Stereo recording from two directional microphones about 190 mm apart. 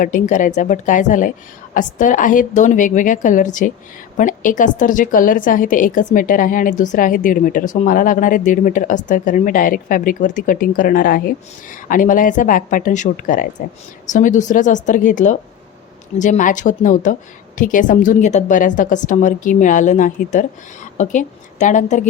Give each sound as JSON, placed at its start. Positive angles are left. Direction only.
{"t": 0.0, "sound": "a woman's voice", "side_deg": 45}